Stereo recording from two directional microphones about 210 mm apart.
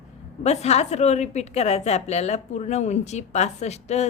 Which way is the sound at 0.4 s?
30° left (ahead or behind).